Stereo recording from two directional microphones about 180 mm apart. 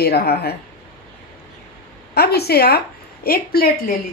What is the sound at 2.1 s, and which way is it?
A woman's voice, 65° left (ahead or behind).